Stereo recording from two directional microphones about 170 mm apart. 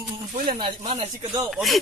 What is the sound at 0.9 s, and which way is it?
Speech, 40° right (ahead or behind).